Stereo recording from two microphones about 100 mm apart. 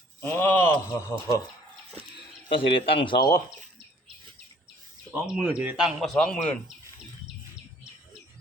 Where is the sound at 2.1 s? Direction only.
60° left (ahead or behind); by 3.4 s 45° left (ahead or behind).